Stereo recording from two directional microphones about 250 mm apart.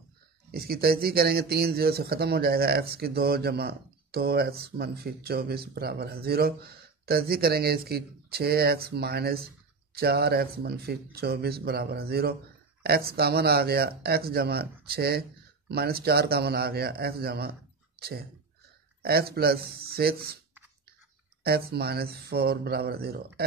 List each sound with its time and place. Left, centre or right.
0.5 s speech: right
19.0 s speech: right
21.4 s speech: right